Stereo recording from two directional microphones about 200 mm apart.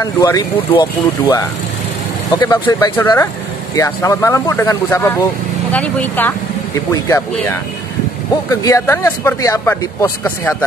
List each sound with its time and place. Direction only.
0.0 s speech: 15° left (ahead or behind)